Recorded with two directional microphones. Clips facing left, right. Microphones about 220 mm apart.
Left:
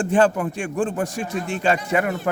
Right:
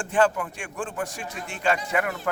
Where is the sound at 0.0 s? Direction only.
30° left (ahead or behind).